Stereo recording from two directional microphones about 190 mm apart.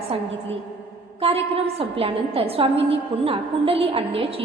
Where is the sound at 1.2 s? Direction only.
30° right (ahead or behind).